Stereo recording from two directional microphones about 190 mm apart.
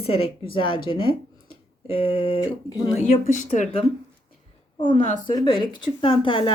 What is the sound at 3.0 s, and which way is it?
Speech, 40° left (ahead or behind).